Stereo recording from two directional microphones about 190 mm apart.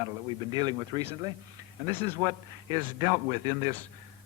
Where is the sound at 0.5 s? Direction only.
20° right (ahead or behind).